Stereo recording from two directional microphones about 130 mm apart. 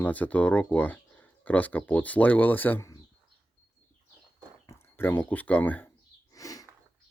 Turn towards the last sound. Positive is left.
turn(degrees=25)  # may be behind; listen again after turning